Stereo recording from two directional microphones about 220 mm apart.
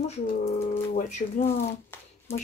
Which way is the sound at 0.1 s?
30° left (ahead or behind).